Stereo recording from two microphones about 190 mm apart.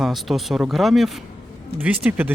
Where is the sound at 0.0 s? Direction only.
Centre (ahead or behind).